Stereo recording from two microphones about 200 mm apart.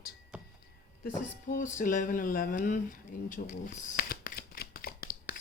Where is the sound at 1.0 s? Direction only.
40° left (ahead or behind).